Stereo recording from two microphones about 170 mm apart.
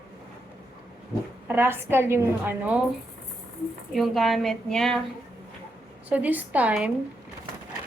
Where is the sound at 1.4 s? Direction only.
15° right (ahead or behind).